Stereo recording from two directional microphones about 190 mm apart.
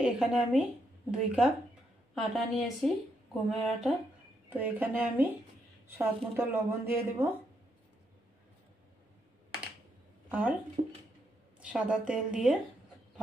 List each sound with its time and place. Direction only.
0.0 s a woman's voice: centre (ahead or behind)
10.8 s a sound: 45° right (ahead or behind)
11.6 s a woman's voice: 5° right (ahead or behind)